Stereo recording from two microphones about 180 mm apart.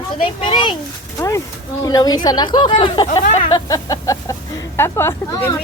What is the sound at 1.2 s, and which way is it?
A woman's voice, 15° left (ahead or behind).